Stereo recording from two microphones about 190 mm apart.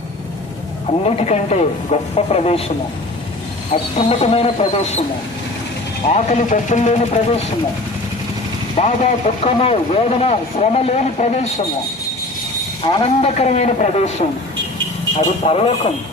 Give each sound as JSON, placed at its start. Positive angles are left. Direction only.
{"t": 1.0, "sound": "speech", "side_deg": 35}
{"t": 6.1, "sound": "speech", "side_deg": 35}
{"t": 8.7, "sound": "speech", "side_deg": 30}
{"t": 12.8, "sound": "speech", "side_deg": 25}
{"t": 13.3, "sound": "speech", "side_deg": 35}
{"t": 15.4, "sound": "speech", "side_deg": 30}